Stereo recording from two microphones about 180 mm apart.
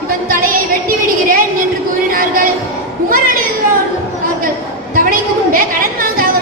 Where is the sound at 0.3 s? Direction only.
50° right (ahead or behind).